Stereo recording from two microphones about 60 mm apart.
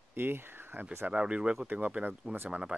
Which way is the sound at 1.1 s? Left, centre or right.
Centre.